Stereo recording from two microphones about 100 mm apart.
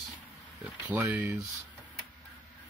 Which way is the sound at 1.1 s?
25° right (ahead or behind).